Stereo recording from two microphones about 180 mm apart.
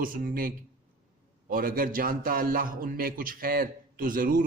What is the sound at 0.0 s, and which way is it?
A man's voice, 50° right (ahead or behind).